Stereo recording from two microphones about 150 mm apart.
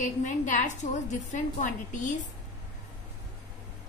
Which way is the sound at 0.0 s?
55° left (ahead or behind).